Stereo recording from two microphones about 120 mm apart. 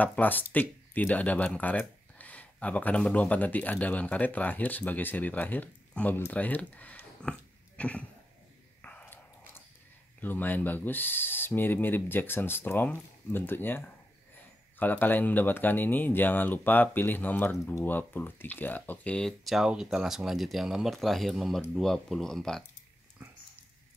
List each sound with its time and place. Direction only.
0.0 s speech: 15° left (ahead or behind)
8.8 s a sound: 15° left (ahead or behind)
10.2 s speech: 15° left (ahead or behind)